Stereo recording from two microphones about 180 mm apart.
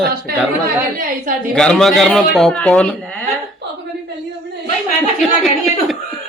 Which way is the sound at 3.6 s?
70° right (ahead or behind).